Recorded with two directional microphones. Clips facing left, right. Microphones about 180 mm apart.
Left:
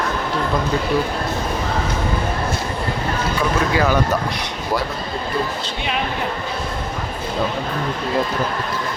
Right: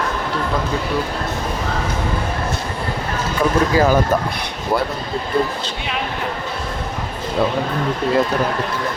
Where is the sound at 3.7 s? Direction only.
40° right (ahead or behind).